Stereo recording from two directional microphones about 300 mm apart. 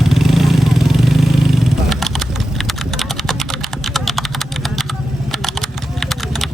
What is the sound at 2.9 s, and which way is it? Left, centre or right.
Typing, centre.